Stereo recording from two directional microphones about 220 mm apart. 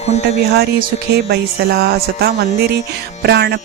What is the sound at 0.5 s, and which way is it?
Speech, 45° right (ahead or behind).